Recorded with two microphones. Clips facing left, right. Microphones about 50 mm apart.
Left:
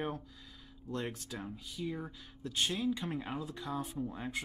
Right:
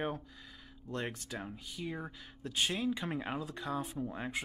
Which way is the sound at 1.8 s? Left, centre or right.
Centre.